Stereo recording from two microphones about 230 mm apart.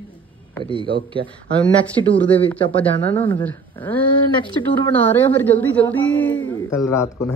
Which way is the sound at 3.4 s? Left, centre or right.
Centre.